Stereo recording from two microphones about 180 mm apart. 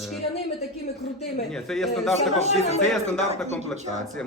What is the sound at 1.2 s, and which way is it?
A man's voice, centre (ahead or behind).